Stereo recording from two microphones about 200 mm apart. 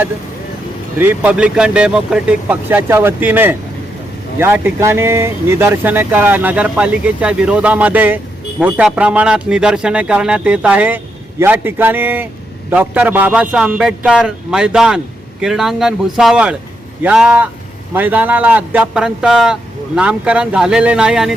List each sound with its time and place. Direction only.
0.9 s a man's voice: 10° right (ahead or behind)